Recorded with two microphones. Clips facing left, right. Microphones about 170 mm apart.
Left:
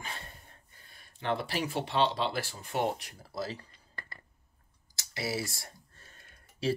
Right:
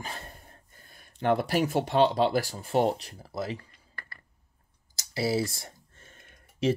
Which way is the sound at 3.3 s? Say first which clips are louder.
Right 3 dB; 20° right (ahead or behind).